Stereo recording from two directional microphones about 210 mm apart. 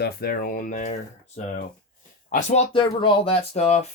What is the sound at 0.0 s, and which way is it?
Speech, 45° left (ahead or behind).